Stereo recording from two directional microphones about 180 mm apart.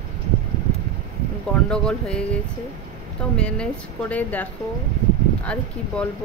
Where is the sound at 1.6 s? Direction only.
5° left (ahead or behind).